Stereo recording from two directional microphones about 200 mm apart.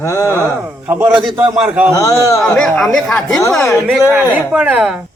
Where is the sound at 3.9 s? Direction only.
10° right (ahead or behind).